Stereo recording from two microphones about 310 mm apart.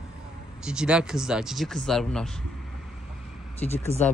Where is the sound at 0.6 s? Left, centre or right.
Centre.